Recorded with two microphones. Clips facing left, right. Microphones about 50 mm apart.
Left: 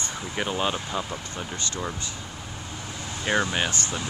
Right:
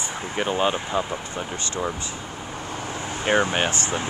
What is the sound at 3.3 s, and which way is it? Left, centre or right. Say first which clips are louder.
Speech: right 4 dB; right.